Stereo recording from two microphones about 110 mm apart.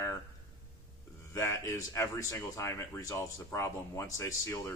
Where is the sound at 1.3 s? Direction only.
25° left (ahead or behind).